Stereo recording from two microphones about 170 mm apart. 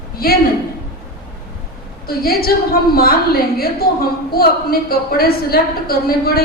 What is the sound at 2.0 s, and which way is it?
Speech, 60° left (ahead or behind).